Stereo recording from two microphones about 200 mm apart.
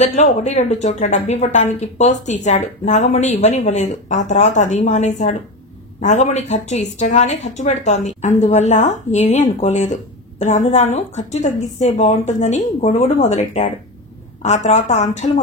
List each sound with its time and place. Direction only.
0.0 s a woman's voice: 35° left (ahead or behind)